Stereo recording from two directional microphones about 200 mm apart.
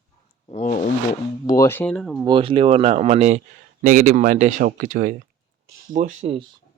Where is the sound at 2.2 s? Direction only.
25° right (ahead or behind).